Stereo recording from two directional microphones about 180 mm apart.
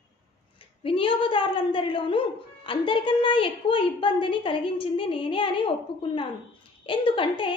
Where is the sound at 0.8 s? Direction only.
30° left (ahead or behind).